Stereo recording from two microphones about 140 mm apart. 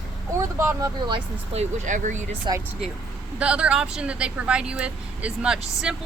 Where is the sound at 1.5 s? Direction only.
55° right (ahead or behind).